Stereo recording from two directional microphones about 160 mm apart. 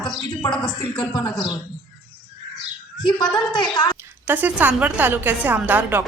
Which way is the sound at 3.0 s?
30° left (ahead or behind).